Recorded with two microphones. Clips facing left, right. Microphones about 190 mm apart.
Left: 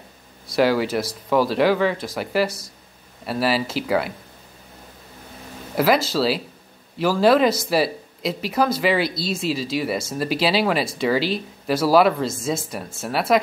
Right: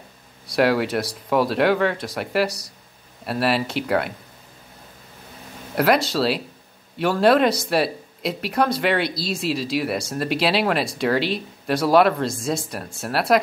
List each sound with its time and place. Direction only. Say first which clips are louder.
0.5 s speech: even; centre (ahead or behind)
5.8 s speech: even; centre (ahead or behind)